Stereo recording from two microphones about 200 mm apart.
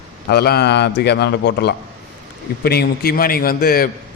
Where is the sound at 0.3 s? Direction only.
50° left (ahead or behind).